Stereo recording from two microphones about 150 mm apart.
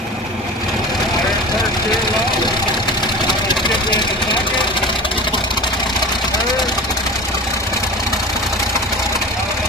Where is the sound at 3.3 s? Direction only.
30° left (ahead or behind).